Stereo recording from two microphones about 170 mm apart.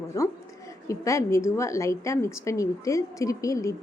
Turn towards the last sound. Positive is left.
turn(degrees=20)  # may be behind; listen again after turning